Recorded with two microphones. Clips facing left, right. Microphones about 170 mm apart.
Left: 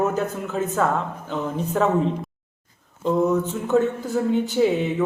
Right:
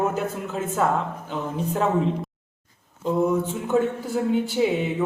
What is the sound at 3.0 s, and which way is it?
Speech, 10° right (ahead or behind).